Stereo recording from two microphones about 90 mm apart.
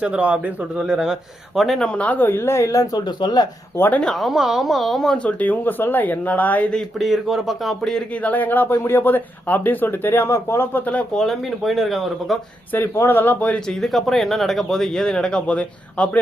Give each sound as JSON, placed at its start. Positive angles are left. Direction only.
{"t": 0.0, "sound": "a man's voice", "side_deg": -15}
{"t": 1.9, "sound": "speech", "side_deg": 15}
{"t": 3.8, "sound": "speech", "side_deg": 20}
{"t": 4.0, "sound": "speech", "side_deg": 0}
{"t": 7.0, "sound": "speech", "side_deg": -5}
{"t": 8.2, "sound": "speech", "side_deg": 20}
{"t": 11.2, "sound": "speech", "side_deg": 0}
{"t": 12.7, "sound": "speech", "side_deg": 25}
{"t": 13.7, "sound": "speech", "side_deg": 0}